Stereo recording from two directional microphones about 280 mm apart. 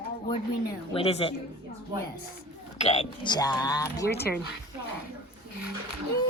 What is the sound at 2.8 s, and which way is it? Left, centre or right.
Speech, left.